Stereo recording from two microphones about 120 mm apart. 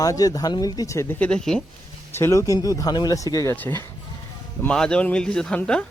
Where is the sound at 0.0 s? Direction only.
30° left (ahead or behind).